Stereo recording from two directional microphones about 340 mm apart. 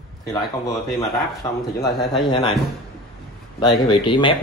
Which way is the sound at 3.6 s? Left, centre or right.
Centre.